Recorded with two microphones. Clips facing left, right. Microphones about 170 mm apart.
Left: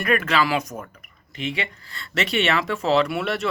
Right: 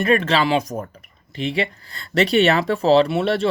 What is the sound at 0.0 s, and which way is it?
Speech, 30° right (ahead or behind).